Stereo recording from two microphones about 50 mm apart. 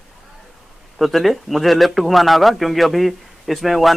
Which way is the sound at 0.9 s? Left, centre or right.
Centre.